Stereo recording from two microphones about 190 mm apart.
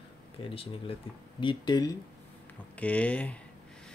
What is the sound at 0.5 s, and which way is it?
Speech, 30° left (ahead or behind).